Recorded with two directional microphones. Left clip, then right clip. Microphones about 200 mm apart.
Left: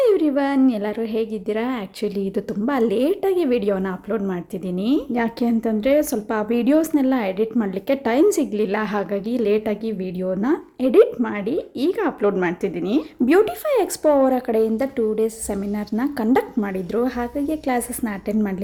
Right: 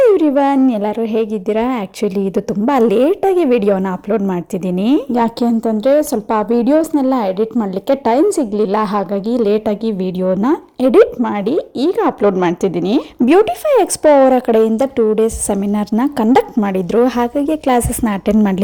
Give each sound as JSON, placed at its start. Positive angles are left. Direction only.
{"t": 0.0, "sound": "speech", "side_deg": -35}